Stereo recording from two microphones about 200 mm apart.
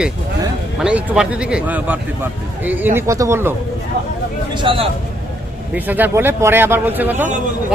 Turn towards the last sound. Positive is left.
turn(degrees=-10)  # may be behind; listen again after turning